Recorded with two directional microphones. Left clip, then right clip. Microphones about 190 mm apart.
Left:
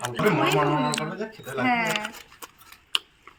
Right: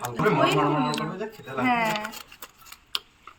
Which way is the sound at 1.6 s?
Centre (ahead or behind).